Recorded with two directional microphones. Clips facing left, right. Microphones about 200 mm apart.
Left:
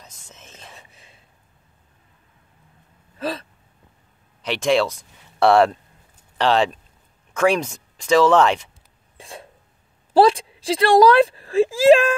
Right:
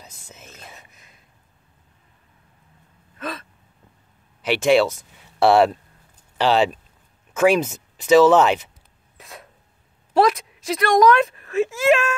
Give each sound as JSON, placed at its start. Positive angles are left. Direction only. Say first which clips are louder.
{"t": 0.0, "sound": "whispering", "louder": "right 2 dB", "side_deg": -10}
{"t": 0.7, "sound": "a sound", "louder": "left 1 dB", "side_deg": 30}
{"t": 3.2, "sound": "hiccup", "louder": "left 5 dB", "side_deg": 30}
{"t": 4.4, "sound": "speech", "louder": "right 3 dB", "side_deg": -5}
{"t": 9.1, "sound": "a sound", "louder": "left 4 dB", "side_deg": 30}
{"t": 10.1, "sound": "speech", "louder": "left 3 dB", "side_deg": 30}